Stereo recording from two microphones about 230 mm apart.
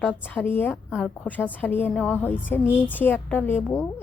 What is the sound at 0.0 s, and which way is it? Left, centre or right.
A woman's voice, centre.